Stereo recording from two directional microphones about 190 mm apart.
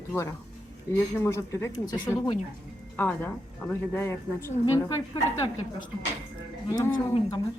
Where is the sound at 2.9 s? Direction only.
10° left (ahead or behind).